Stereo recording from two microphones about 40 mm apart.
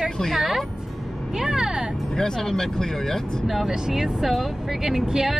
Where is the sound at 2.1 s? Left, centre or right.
Centre.